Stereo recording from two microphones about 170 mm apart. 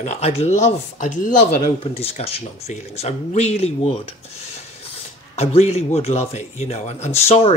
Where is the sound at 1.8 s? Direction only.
35° left (ahead or behind).